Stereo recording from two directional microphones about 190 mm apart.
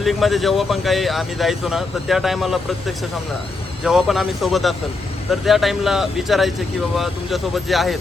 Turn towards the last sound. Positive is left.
turn(degrees=0)  # may be behind; listen again after turning